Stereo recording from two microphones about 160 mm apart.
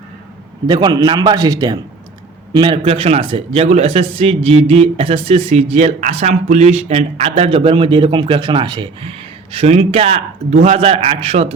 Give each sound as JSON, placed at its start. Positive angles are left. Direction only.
{"t": 0.7, "sound": "a man's voice", "side_deg": -25}